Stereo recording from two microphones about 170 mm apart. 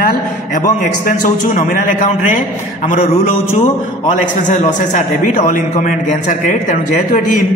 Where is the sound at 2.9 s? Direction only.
35° left (ahead or behind).